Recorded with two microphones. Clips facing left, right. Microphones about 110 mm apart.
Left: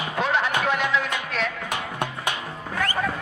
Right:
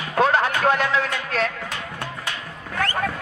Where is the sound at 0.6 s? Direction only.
40° right (ahead or behind).